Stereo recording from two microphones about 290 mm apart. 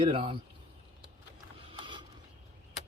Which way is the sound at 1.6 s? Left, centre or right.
Centre.